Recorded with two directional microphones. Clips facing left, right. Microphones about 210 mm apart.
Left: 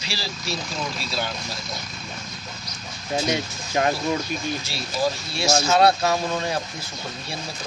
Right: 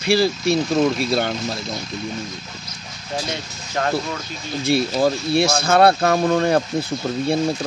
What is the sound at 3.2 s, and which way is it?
Speech, 15° left (ahead or behind).